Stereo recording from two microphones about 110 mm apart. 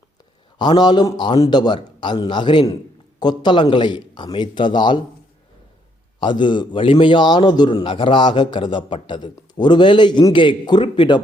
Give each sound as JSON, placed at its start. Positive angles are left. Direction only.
{"t": 0.6, "sound": "a man's voice", "side_deg": 40}
{"t": 6.1, "sound": "a man's voice", "side_deg": 45}